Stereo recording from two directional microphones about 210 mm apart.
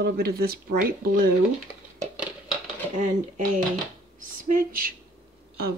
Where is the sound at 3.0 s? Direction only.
35° right (ahead or behind).